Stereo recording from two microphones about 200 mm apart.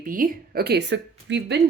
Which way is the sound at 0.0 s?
45° right (ahead or behind).